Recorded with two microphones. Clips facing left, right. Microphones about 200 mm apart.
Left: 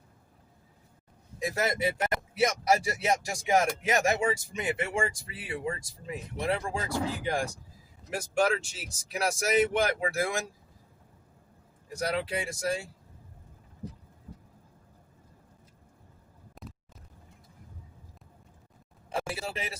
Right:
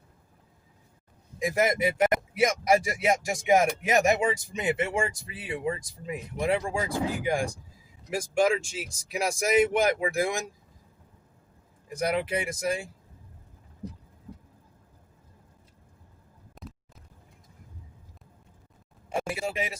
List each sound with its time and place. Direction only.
1.4 s speech: 15° right (ahead or behind)
11.9 s speech: 15° right (ahead or behind)
19.1 s a sound: 15° right (ahead or behind)